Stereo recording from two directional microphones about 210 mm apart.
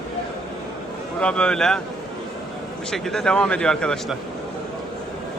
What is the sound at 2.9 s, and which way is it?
Speech, 5° left (ahead or behind).